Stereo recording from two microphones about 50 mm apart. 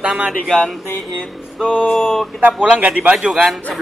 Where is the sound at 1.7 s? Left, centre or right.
Left.